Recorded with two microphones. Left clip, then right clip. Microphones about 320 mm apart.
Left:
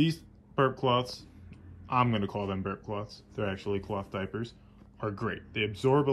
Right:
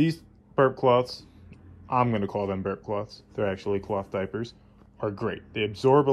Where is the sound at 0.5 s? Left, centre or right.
Centre.